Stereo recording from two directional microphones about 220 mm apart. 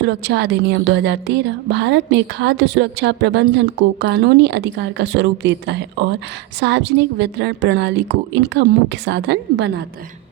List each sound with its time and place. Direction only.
0.0 s a woman's voice: 50° right (ahead or behind)